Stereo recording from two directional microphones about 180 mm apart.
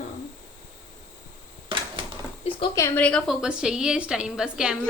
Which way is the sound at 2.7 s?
15° left (ahead or behind).